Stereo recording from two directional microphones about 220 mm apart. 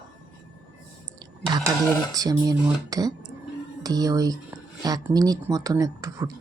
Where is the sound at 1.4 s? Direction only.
20° right (ahead or behind).